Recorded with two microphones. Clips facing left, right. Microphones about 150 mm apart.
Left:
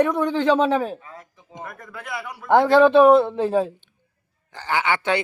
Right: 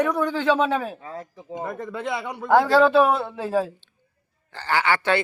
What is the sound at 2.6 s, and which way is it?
A man's voice, 20° left (ahead or behind).